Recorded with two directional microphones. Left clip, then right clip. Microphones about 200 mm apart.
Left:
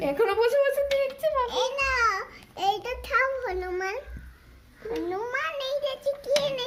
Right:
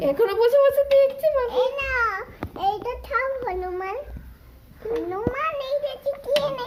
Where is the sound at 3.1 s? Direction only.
45° left (ahead or behind).